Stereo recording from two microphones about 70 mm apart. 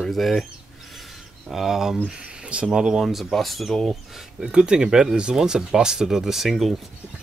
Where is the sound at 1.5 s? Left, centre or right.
Centre.